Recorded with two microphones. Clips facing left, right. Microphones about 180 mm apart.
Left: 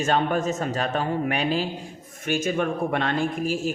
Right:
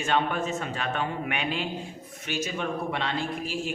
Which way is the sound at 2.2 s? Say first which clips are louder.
Left 7 dB; 50° left (ahead or behind).